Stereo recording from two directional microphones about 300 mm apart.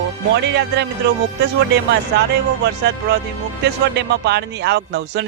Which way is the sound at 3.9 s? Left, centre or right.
Right.